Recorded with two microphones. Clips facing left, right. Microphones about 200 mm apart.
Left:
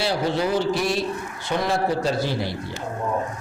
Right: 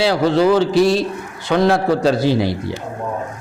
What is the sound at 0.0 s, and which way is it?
A man's voice, 90° right.